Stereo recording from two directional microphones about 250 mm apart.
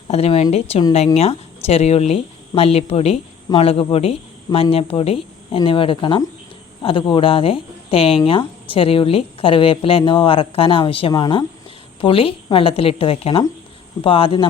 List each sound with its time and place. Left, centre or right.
0.1 s speech: left